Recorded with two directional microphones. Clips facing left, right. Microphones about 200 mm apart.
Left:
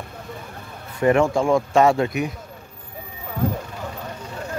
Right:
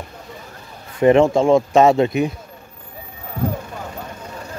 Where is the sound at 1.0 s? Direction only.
25° right (ahead or behind).